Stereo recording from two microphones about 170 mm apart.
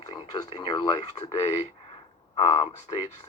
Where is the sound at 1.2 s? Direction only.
40° left (ahead or behind).